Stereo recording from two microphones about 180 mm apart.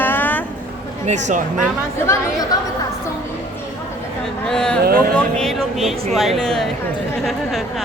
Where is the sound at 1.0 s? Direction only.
40° right (ahead or behind).